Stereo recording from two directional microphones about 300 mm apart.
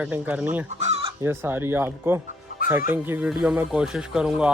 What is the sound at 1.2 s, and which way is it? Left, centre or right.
Speech, centre.